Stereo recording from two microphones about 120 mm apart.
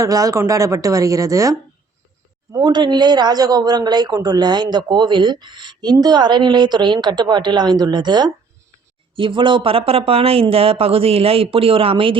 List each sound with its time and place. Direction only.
0.0 s a woman's voice: 30° right (ahead or behind)
2.5 s speech: 40° right (ahead or behind)